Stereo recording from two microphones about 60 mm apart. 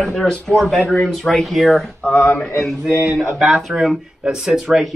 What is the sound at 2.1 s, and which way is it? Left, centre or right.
Speech, left.